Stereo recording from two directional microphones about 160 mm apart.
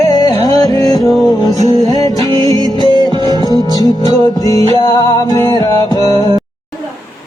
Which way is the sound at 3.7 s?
25° left (ahead or behind).